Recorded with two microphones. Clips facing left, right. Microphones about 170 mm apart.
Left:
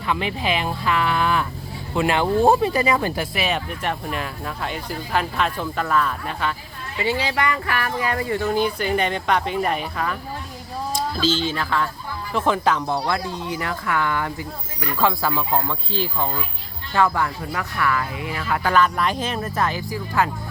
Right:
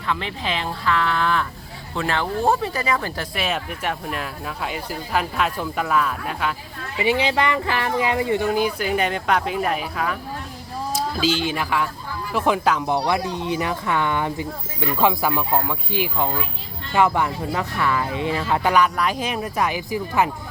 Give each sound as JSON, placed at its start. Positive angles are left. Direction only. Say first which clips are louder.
{"t": 0.1, "sound": "speech", "louder": "left 3 dB", "side_deg": 15}
{"t": 3.3, "sound": "speech", "louder": "left 1 dB", "side_deg": 0}
{"t": 7.0, "sound": "speech", "louder": "right 3 dB", "side_deg": -20}
{"t": 8.4, "sound": "speech", "louder": "even", "side_deg": -10}
{"t": 18.7, "sound": "speech", "louder": "left 2 dB", "side_deg": -10}